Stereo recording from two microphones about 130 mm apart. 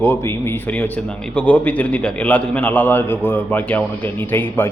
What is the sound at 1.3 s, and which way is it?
A man's voice, 10° left (ahead or behind).